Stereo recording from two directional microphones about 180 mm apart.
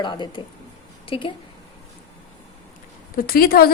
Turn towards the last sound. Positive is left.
turn(degrees=55)  # may be behind; listen again after turning